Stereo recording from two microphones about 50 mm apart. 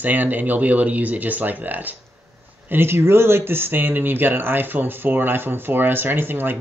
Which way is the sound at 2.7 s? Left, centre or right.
Right.